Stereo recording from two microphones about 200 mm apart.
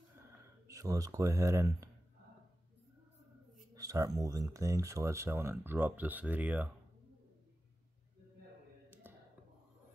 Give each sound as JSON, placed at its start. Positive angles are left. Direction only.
{"t": 0.7, "sound": "speech", "side_deg": -15}
{"t": 3.7, "sound": "speech", "side_deg": -15}